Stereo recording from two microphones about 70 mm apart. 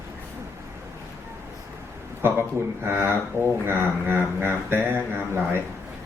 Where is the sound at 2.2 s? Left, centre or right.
Right.